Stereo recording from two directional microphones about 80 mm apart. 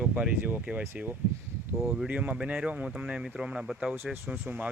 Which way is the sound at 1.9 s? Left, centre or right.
Centre.